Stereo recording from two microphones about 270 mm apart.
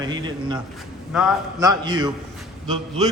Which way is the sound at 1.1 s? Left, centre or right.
Centre.